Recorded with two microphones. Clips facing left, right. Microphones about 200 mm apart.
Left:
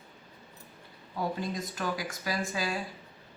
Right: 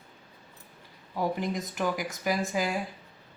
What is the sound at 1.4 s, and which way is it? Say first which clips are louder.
Speech: right 4 dB; 20° right (ahead or behind).